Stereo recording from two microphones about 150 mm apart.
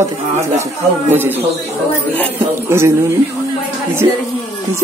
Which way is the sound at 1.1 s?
15° right (ahead or behind).